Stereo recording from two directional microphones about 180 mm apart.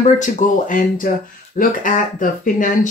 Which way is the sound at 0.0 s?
45° left (ahead or behind).